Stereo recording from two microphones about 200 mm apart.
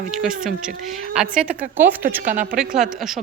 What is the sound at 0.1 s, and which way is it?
A woman's voice, centre (ahead or behind).